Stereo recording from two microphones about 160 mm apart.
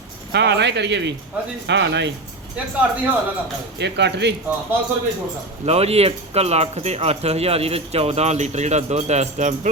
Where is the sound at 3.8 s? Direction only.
90° right.